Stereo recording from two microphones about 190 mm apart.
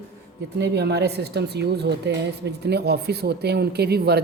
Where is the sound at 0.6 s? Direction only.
60° right (ahead or behind).